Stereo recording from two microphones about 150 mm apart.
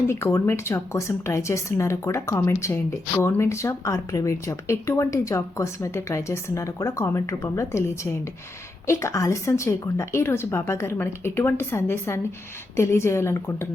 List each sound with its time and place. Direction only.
0.1 s speech: 20° left (ahead or behind)
8.9 s speech: 20° left (ahead or behind)